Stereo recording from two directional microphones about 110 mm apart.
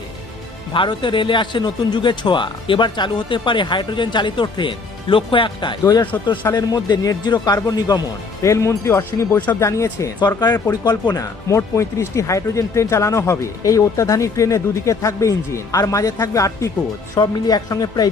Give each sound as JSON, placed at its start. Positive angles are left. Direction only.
{"t": 0.7, "sound": "a man's voice", "side_deg": 45}
{"t": 6.5, "sound": "speech", "side_deg": 35}
{"t": 10.2, "sound": "speech", "side_deg": 40}